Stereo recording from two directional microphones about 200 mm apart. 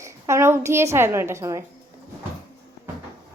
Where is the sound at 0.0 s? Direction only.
15° right (ahead or behind).